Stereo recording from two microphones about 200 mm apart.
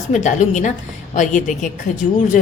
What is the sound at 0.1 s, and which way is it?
A woman's voice, 35° left (ahead or behind).